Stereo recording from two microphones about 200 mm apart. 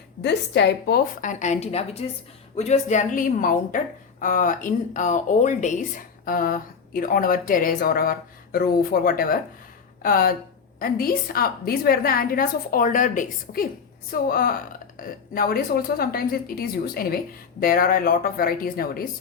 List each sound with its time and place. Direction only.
0.2 s a woman's voice: 60° left (ahead or behind)